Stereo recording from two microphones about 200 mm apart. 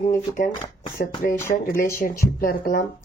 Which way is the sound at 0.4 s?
40° left (ahead or behind).